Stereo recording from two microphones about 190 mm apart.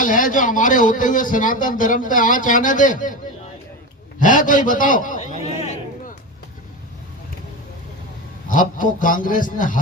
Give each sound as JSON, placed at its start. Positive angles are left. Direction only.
{"t": 0.0, "sound": "a man's voice", "side_deg": 45}
{"t": 4.2, "sound": "a man's voice", "side_deg": 45}
{"t": 8.4, "sound": "a man's voice", "side_deg": 45}